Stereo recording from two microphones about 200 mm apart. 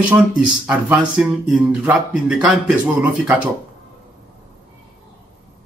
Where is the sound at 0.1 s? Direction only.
10° right (ahead or behind).